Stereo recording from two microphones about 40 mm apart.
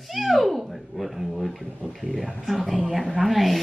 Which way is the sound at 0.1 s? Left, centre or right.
Centre.